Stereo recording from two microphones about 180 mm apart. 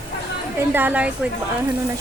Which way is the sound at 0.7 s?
10° right (ahead or behind).